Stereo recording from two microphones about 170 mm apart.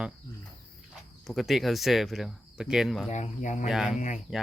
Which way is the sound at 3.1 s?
45° left (ahead or behind).